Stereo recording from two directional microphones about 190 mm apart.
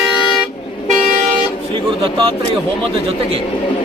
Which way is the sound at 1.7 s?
25° right (ahead or behind).